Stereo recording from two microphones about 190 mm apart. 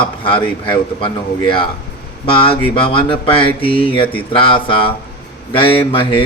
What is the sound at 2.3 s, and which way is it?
Speech, 30° left (ahead or behind).